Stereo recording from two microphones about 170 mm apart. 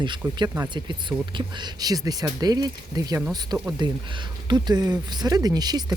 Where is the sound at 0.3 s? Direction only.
25° right (ahead or behind).